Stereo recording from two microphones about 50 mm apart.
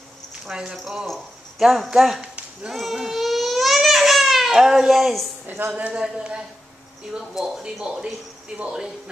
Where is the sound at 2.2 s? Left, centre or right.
Right.